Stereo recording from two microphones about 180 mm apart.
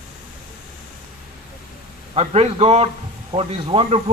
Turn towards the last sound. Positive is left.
turn(degrees=-35)  # may be behind; listen again after turning